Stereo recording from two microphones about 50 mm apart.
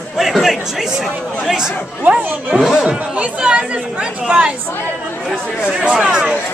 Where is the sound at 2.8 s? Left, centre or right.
Right.